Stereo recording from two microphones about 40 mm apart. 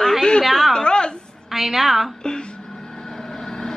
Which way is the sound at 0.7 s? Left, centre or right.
Left.